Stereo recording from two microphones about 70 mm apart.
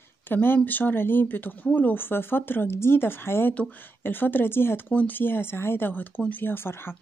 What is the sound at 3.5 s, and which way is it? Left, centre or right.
Speech, left.